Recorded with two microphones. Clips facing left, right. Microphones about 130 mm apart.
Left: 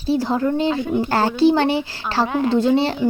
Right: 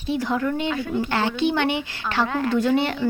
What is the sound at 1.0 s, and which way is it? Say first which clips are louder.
Speech: left 8 dB; 40° left (ahead or behind).